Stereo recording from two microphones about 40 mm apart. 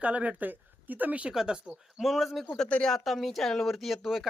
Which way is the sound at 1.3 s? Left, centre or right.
Centre.